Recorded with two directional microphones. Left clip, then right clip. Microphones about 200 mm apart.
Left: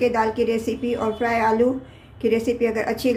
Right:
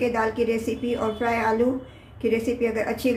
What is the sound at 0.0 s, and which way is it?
A woman's voice, 25° left (ahead or behind).